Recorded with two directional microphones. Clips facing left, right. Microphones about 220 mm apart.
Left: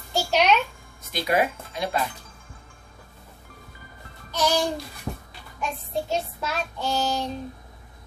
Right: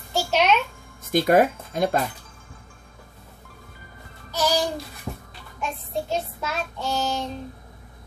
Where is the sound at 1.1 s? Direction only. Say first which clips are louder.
Right 6 dB; 50° right (ahead or behind).